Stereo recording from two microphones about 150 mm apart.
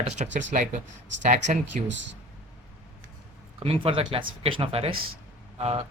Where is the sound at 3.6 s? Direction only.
40° right (ahead or behind).